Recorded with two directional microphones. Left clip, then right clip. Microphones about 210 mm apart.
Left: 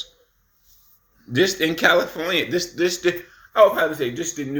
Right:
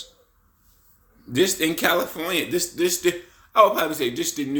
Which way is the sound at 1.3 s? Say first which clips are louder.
Left 2 dB; 15° right (ahead or behind).